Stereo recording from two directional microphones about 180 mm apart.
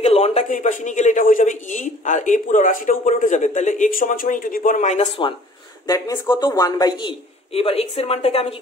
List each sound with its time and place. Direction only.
0.0 s speech: 35° left (ahead or behind)
5.9 s speech: 20° left (ahead or behind)